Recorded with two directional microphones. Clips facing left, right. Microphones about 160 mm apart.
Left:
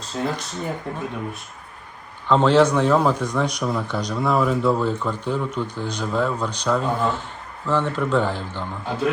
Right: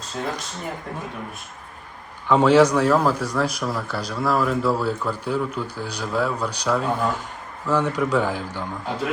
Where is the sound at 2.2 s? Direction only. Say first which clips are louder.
Right 1 dB; 10° right (ahead or behind).